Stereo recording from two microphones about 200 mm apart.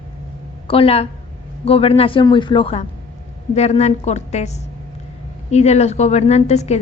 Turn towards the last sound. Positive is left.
turn(degrees=30)  # may be behind; listen again after turning